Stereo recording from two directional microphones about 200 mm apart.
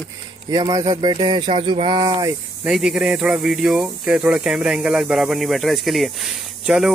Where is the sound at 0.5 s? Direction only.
20° right (ahead or behind).